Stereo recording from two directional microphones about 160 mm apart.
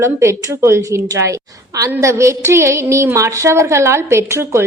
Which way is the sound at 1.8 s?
20° right (ahead or behind).